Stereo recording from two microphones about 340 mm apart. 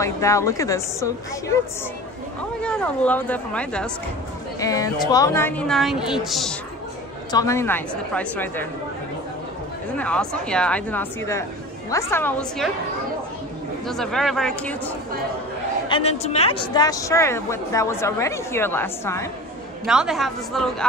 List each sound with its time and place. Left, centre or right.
0.0 s a woman's voice: centre
2.6 s a woman's voice: centre
7.2 s a woman's voice: centre
9.9 s a woman's voice: centre
13.8 s a woman's voice: centre
15.9 s a woman's voice: centre